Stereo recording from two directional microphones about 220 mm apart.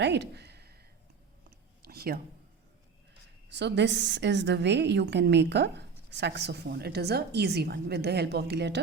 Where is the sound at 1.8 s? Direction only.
45° right (ahead or behind).